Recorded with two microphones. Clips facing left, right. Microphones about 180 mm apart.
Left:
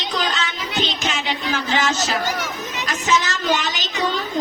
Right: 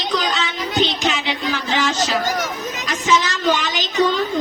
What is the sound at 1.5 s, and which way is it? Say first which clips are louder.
Speech: left 1 dB; 45° left (ahead or behind).